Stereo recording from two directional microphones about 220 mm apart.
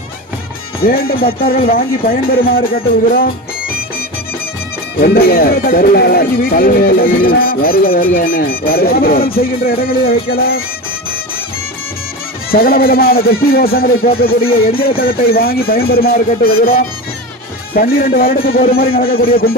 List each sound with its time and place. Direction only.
0.8 s speech: 40° left (ahead or behind)
5.0 s speech: 45° left (ahead or behind)
12.4 s speech: 40° left (ahead or behind)